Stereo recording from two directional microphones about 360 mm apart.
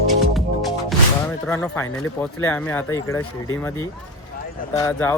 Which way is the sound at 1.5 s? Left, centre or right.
Centre.